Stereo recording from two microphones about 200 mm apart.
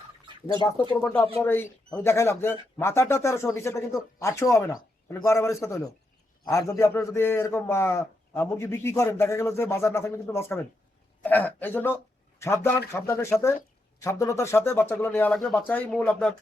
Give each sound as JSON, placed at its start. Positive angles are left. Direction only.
{"t": 0.4, "sound": "a man's voice", "side_deg": 20}